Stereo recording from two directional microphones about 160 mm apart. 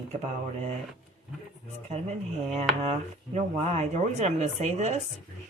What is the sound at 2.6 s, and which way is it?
Speech, 45° right (ahead or behind).